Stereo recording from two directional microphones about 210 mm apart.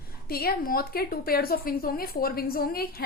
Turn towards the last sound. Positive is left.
turn(degrees=45)  # may be behind; listen again after turning